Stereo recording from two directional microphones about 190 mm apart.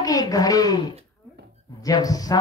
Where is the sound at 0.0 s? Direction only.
20° left (ahead or behind).